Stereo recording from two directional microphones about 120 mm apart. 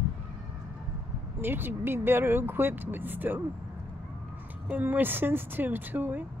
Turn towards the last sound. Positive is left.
turn(degrees=-15)  # may be behind; listen again after turning